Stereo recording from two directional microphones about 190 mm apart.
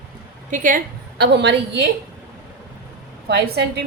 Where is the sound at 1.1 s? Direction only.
65° right (ahead or behind).